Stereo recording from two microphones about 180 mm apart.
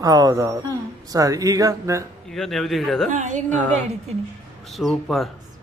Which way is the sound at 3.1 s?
45° right (ahead or behind).